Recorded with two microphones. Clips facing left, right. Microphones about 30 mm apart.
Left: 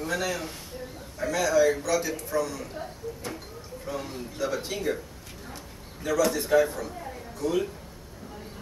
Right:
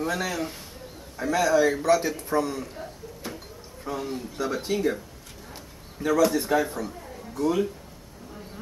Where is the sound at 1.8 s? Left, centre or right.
Right.